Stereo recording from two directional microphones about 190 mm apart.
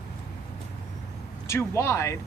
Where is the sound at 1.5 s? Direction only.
15° left (ahead or behind).